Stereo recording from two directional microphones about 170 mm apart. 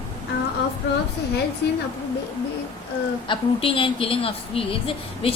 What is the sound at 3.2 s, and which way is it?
A woman's voice, 30° left (ahead or behind).